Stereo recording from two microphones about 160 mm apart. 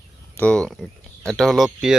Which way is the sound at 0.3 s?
5° left (ahead or behind).